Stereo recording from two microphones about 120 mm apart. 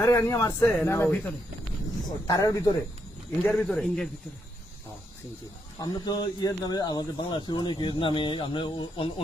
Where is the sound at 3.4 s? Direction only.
5° left (ahead or behind).